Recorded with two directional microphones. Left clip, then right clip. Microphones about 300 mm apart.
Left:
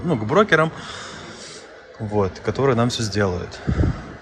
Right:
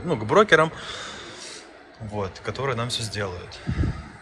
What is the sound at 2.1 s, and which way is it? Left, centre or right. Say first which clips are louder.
Speech: left 8 dB; centre.